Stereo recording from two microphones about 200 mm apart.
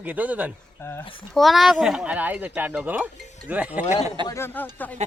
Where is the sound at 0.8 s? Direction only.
15° left (ahead or behind).